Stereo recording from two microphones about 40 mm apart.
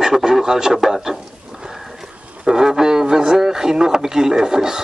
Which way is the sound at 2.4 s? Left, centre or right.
Centre.